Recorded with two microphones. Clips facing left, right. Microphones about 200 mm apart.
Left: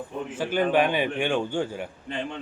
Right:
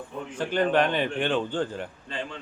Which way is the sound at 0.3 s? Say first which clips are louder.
Even; 5° left (ahead or behind).